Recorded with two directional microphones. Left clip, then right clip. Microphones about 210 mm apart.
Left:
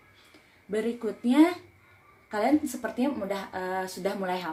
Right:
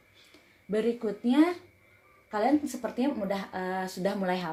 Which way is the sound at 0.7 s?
30° right (ahead or behind).